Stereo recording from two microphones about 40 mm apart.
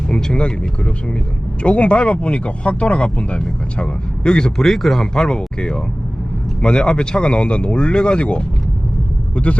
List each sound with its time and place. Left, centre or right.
0.1 s speech: centre
4.5 s speech: centre
5.1 s speech: centre